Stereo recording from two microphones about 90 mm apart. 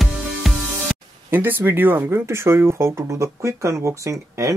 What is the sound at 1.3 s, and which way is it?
Speech, 25° right (ahead or behind).